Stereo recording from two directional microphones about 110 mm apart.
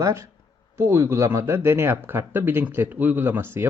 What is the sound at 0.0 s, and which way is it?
Speech, 25° right (ahead or behind).